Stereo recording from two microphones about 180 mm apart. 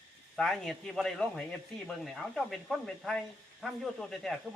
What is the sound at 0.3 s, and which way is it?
Speech, centre (ahead or behind).